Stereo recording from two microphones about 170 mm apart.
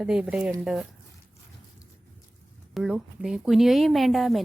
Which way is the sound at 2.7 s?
5° right (ahead or behind).